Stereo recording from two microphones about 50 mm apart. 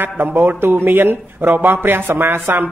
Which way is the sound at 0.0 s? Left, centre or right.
Right.